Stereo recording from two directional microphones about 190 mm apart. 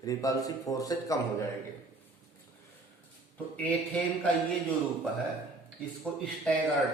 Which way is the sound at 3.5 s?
5° left (ahead or behind).